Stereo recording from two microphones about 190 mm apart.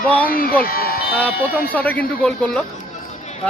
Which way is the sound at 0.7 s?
50° left (ahead or behind).